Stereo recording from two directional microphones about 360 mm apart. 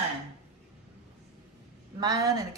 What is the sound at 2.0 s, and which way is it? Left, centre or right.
Speech, centre.